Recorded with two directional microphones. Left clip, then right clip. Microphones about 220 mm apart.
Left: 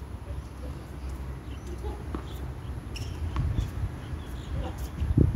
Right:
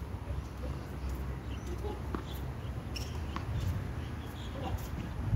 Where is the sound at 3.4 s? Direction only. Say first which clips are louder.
Left 3 dB; 5° left (ahead or behind).